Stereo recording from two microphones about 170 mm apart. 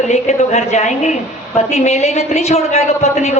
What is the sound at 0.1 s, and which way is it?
A woman's voice, 40° left (ahead or behind).